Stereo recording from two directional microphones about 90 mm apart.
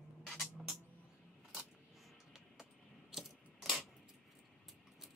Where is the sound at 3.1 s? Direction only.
5° right (ahead or behind).